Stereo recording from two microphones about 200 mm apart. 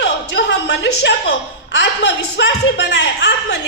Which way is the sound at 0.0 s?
60° left (ahead or behind).